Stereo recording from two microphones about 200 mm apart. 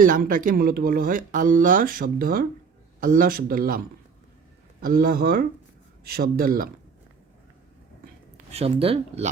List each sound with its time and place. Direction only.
0.0 s speech: 45° right (ahead or behind)
8.5 s speech: 30° right (ahead or behind)